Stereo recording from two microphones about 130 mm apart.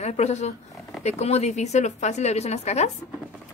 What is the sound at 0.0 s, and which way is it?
Speech, 55° left (ahead or behind).